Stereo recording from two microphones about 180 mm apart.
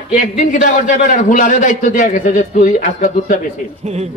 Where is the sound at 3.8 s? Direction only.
35° right (ahead or behind).